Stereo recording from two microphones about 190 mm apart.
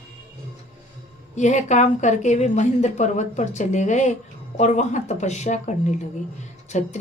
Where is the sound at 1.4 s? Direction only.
40° left (ahead or behind).